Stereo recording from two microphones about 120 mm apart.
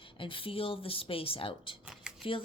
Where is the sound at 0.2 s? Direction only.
45° left (ahead or behind).